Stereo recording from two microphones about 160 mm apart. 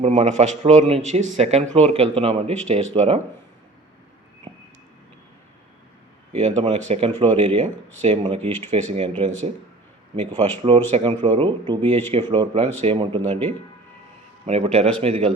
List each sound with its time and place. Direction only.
0.0 s speech: 45° right (ahead or behind)
4.5 s vehicle: 35° right (ahead or behind)
6.3 s speech: 45° right (ahead or behind)
10.9 s speech: 35° right (ahead or behind)
14.4 s speech: 40° right (ahead or behind)